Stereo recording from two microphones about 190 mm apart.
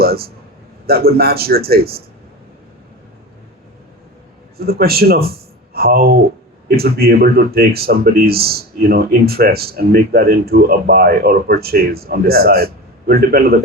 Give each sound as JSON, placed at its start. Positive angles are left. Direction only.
{"t": 0.0, "sound": "a sound", "side_deg": -55}
{"t": 0.9, "sound": "speech", "side_deg": -55}
{"t": 4.5, "sound": "speech", "side_deg": -55}